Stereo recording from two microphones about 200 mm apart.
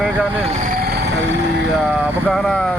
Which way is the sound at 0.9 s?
60° right (ahead or behind).